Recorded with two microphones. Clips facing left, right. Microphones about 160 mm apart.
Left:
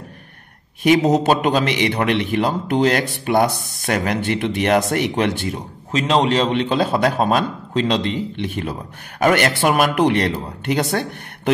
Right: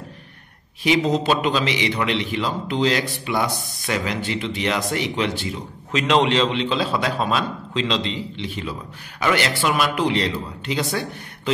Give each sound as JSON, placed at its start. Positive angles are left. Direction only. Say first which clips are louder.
{"t": 0.8, "sound": "a man's voice", "louder": "left 5 dB", "side_deg": 50}
{"t": 5.9, "sound": "a man's voice", "louder": "left 1 dB", "side_deg": 35}